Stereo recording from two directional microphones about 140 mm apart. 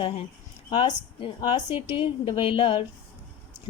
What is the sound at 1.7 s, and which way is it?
Speech, 20° right (ahead or behind).